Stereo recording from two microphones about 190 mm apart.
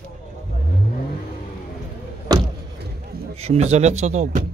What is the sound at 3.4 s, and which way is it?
Speech, 35° right (ahead or behind).